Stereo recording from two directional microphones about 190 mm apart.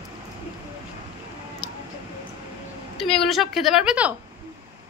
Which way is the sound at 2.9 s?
Centre (ahead or behind).